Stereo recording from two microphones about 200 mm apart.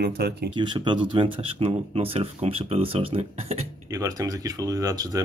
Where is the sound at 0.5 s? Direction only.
25° right (ahead or behind).